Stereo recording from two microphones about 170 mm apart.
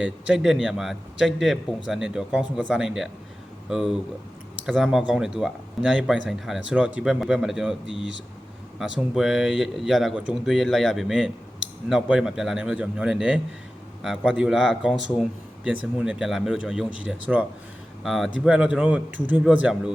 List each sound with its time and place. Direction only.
0.0 s a man's voice: 5° right (ahead or behind)
7.9 s speech: 90° right
8.8 s a man's voice: centre (ahead or behind)